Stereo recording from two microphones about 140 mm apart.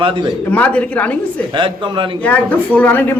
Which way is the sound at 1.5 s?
35° right (ahead or behind).